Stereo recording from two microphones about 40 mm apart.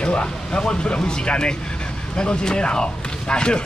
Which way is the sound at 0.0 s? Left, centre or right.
Left.